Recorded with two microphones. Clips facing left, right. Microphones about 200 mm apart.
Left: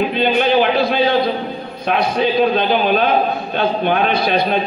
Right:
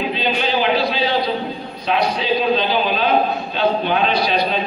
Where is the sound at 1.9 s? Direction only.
55° left (ahead or behind).